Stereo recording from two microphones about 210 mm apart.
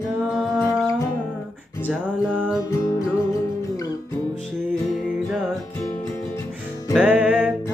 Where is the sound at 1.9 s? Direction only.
5° right (ahead or behind).